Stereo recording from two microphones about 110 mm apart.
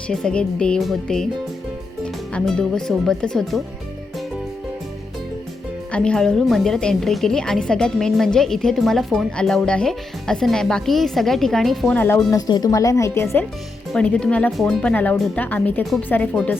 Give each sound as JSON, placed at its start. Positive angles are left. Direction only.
{"t": 0.1, "sound": "a woman's voice", "side_deg": 5}
{"t": 2.3, "sound": "a woman's voice", "side_deg": 5}
{"t": 5.9, "sound": "a woman's voice", "side_deg": 5}
{"t": 11.9, "sound": "speech", "side_deg": 20}
{"t": 12.3, "sound": "a woman's voice", "side_deg": 35}
{"t": 13.9, "sound": "speech", "side_deg": 10}
{"t": 15.8, "sound": "a woman's voice", "side_deg": 0}
{"t": 16.0, "sound": "speech", "side_deg": 15}